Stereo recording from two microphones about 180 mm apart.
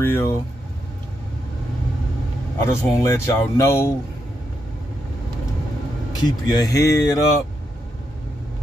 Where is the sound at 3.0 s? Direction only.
15° left (ahead or behind).